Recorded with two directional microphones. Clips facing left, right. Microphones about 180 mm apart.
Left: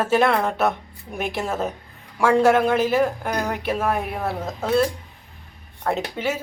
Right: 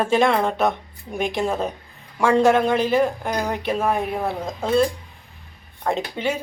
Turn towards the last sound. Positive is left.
turn(degrees=5)  # may be behind; listen again after turning